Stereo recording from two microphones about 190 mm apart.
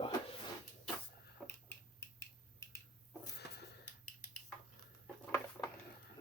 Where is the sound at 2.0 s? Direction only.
15° left (ahead or behind).